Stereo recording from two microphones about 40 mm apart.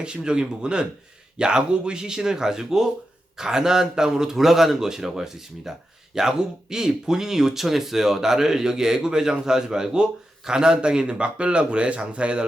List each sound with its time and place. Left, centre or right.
0.0 s speech: right